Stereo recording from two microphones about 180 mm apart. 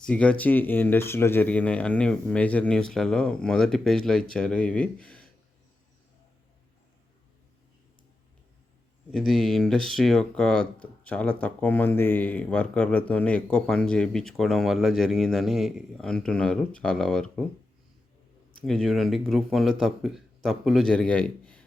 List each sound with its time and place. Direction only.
0.0 s speech: 5° left (ahead or behind)
9.1 s speech: centre (ahead or behind)
18.6 s speech: centre (ahead or behind)